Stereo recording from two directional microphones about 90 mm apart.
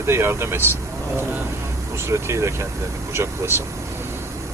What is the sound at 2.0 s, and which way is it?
Speech, 30° right (ahead or behind).